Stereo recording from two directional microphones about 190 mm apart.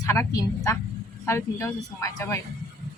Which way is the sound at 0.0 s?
15° left (ahead or behind).